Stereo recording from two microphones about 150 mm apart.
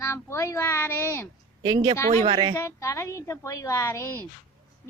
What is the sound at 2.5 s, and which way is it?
A woman's voice, 20° left (ahead or behind).